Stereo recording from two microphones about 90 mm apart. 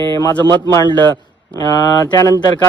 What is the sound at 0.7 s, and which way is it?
Speech, 50° left (ahead or behind).